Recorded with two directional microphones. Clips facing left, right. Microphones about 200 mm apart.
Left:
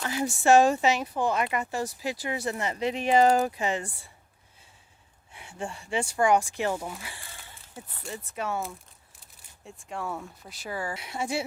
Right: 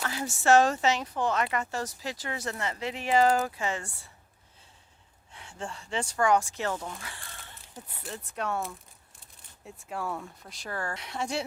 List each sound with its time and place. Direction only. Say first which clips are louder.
0.0 s speech: left 3 dB; 15° left (ahead or behind)
5.3 s speech: left 3 dB; 10° left (ahead or behind)